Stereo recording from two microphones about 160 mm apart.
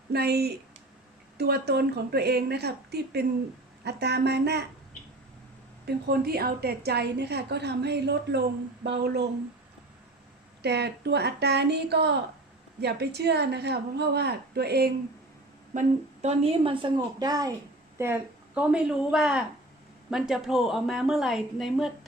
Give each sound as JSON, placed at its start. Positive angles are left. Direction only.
{"t": 0.1, "sound": "a woman's voice", "side_deg": -85}
{"t": 5.8, "sound": "a woman's voice", "side_deg": -75}
{"t": 10.6, "sound": "a woman's voice", "side_deg": -90}
{"t": 15.7, "sound": "a woman's voice", "side_deg": -45}